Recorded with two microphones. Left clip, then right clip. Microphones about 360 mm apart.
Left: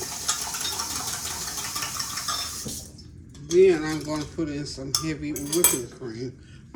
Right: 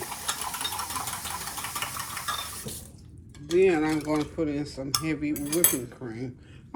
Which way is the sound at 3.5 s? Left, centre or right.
Right.